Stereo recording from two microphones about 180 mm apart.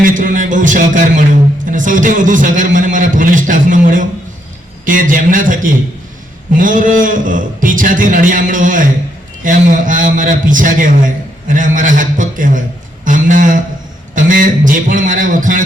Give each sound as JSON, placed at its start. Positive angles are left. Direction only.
{"t": 0.0, "sound": "a man's voice", "side_deg": -45}